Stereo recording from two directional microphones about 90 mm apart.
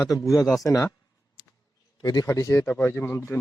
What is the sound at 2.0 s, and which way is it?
Speech, 55° left (ahead or behind).